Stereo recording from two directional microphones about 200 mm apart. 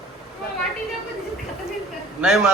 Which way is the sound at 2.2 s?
5° right (ahead or behind).